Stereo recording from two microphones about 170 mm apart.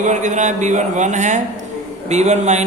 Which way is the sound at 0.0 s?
45° right (ahead or behind).